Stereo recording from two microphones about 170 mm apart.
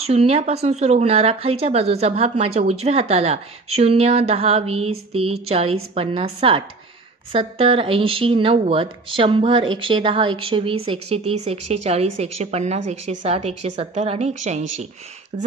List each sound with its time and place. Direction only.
0.0 s speech: 35° right (ahead or behind)